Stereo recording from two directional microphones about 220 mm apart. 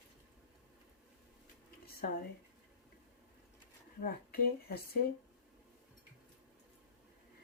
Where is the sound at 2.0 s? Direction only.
40° left (ahead or behind).